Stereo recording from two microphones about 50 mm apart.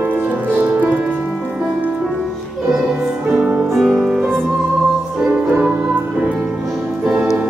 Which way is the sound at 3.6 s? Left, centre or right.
Centre.